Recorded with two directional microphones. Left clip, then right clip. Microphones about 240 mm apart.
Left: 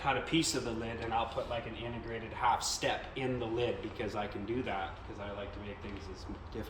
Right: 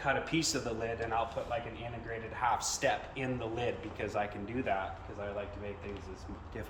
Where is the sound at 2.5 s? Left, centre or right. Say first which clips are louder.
Even; centre.